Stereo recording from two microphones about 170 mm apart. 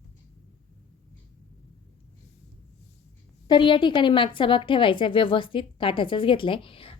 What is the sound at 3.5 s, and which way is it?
A woman's voice, 30° left (ahead or behind).